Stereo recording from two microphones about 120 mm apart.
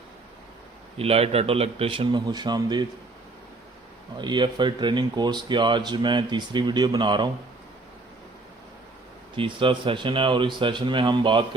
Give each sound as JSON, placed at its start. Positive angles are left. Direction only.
{"t": 0.9, "sound": "speech", "side_deg": -55}
{"t": 4.2, "sound": "speech", "side_deg": -40}
{"t": 9.3, "sound": "speech", "side_deg": -45}